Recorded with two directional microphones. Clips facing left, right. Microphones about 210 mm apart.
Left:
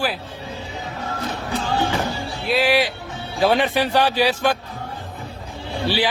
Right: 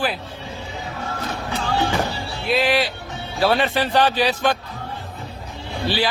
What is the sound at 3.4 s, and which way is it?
A man's voice, 15° left (ahead or behind).